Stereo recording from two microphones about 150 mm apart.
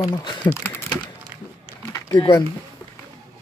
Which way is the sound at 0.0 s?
30° left (ahead or behind).